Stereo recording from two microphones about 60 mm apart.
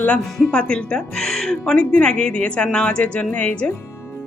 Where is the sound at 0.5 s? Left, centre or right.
Centre.